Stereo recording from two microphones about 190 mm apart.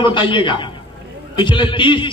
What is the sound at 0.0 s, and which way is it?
A man's voice, 25° left (ahead or behind).